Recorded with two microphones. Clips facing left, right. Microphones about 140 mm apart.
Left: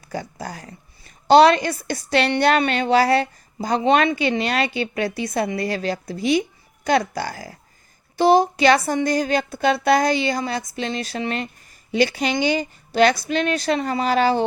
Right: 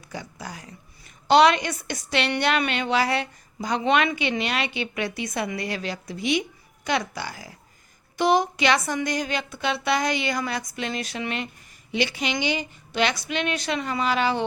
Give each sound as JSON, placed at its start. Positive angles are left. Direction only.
{"t": 0.1, "sound": "speech", "side_deg": 40}